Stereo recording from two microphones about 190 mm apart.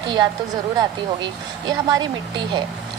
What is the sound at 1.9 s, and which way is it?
Speech, 20° right (ahead or behind).